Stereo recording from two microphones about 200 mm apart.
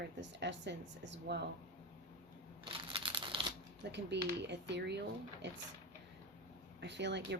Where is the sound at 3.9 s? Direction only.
60° right (ahead or behind).